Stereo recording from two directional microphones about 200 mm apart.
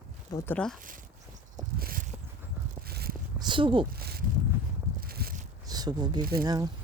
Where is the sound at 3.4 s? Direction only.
25° right (ahead or behind).